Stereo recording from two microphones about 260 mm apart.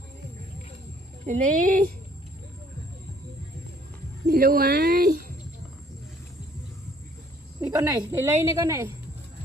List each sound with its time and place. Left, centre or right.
1.2 s speech: right
4.3 s speech: right
7.6 s a woman's voice: centre